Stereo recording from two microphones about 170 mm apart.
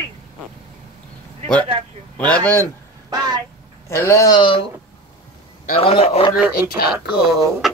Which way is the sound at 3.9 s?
15° left (ahead or behind).